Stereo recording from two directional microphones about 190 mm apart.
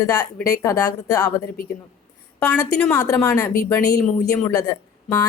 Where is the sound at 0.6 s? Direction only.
20° left (ahead or behind).